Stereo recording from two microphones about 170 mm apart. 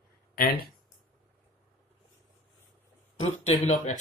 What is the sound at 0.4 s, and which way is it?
Speech, 60° left (ahead or behind).